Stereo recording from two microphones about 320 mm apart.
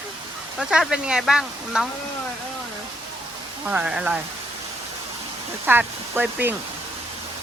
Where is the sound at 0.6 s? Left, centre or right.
Centre.